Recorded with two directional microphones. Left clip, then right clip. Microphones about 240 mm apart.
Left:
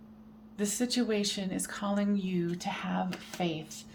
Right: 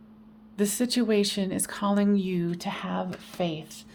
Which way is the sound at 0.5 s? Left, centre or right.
Right.